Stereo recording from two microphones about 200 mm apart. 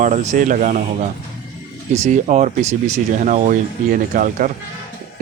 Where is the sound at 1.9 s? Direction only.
35° right (ahead or behind).